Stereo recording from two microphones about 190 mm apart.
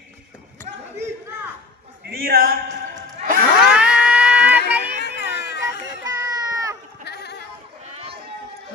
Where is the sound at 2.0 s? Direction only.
50° right (ahead or behind).